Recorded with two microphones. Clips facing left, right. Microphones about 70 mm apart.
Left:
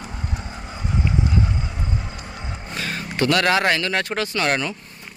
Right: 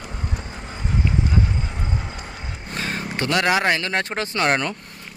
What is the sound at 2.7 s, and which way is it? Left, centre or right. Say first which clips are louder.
Speech: right 1 dB; right.